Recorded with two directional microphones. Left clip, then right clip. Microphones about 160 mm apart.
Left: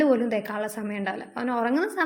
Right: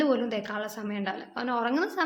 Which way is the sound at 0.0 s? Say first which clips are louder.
Left 4 dB; 20° left (ahead or behind).